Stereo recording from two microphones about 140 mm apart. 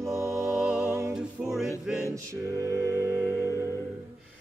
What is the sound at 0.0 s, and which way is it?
Music, 20° right (ahead or behind).